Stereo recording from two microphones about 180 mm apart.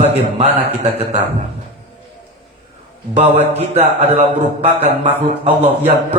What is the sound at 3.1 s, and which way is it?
A man's voice, 35° right (ahead or behind).